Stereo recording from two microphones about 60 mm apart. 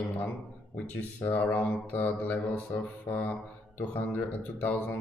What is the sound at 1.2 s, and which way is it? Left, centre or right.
Speech, left.